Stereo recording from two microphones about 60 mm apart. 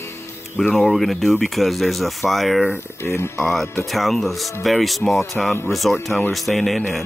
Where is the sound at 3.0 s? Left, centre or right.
Left.